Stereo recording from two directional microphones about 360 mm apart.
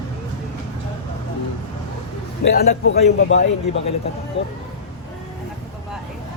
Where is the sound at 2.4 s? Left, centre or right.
Left.